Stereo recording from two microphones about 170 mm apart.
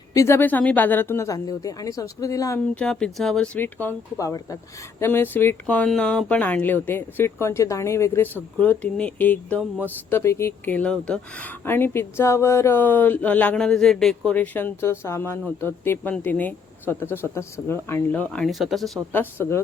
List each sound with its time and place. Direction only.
0.1 s speech: 15° left (ahead or behind)
2.7 s speech: 5° left (ahead or behind)
19.1 s speech: 15° left (ahead or behind)